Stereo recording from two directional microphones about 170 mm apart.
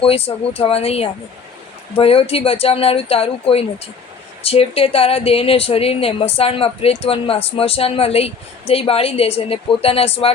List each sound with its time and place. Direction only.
0.0 s a woman's voice: 35° left (ahead or behind)